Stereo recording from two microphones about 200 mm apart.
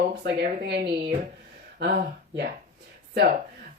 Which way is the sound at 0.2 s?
50° right (ahead or behind).